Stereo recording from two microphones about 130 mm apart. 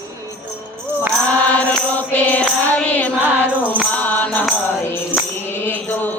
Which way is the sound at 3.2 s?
15° right (ahead or behind).